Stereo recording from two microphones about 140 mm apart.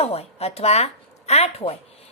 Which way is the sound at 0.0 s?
45° left (ahead or behind).